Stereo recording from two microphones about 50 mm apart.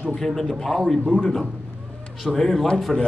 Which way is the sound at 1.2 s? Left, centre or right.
Centre.